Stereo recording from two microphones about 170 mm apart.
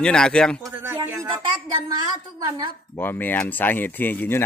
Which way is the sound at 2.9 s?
10° left (ahead or behind).